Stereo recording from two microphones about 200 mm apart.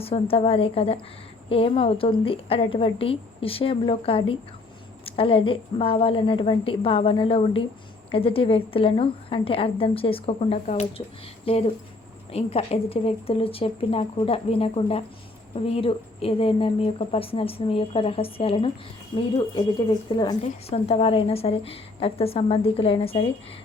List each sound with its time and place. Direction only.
0.0 s a woman's voice: 30° left (ahead or behind)
20.4 s a woman's voice: 30° left (ahead or behind)